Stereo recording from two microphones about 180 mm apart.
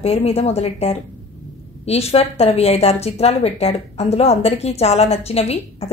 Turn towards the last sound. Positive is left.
turn(degrees=35)  # may be behind; listen again after turning